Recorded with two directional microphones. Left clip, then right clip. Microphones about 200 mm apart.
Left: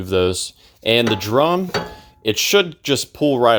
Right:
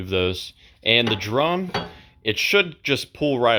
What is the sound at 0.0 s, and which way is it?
Dishes, 25° left (ahead or behind).